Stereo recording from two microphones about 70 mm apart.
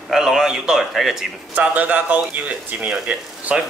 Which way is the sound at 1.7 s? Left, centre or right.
Right.